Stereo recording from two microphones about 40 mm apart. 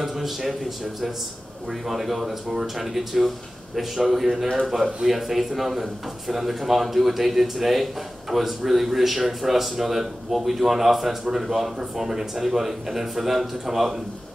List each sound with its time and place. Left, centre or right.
0.0 s a man's voice: centre
1.7 s a man's voice: centre